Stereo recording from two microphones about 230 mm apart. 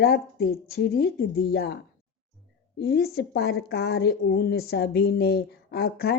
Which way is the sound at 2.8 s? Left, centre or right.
Left.